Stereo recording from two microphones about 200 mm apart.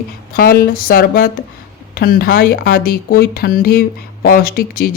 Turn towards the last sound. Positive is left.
turn(degrees=45)  # may be behind; listen again after turning